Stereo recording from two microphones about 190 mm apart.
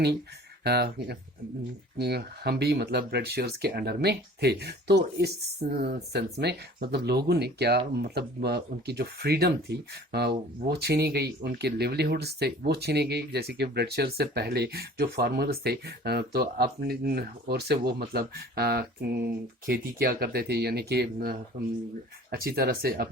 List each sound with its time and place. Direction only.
0.6 s speech: 60° right (ahead or behind)
21.5 s speech: 40° right (ahead or behind)
22.3 s speech: 55° right (ahead or behind)